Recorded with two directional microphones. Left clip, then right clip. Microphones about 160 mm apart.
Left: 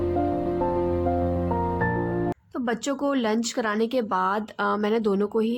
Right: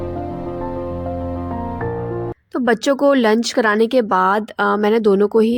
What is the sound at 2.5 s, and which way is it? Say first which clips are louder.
Speech: right 14 dB; 40° right (ahead or behind).